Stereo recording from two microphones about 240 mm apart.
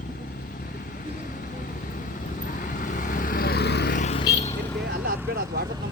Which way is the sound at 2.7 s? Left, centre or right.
Left.